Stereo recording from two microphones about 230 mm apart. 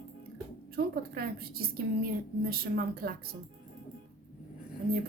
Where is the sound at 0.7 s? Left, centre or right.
Right.